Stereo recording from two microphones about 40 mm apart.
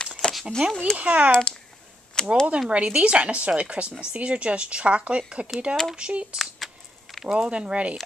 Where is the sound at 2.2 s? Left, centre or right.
Centre.